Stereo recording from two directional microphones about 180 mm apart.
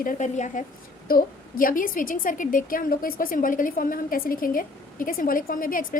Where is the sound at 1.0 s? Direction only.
55° left (ahead or behind).